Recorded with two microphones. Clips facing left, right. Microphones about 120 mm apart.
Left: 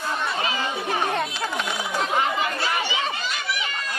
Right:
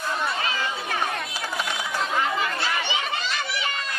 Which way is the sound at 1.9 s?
20° left (ahead or behind).